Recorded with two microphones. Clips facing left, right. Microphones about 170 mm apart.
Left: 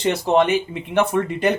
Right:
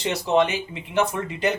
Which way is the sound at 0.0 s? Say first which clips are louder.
Left 3 dB; 55° left (ahead or behind).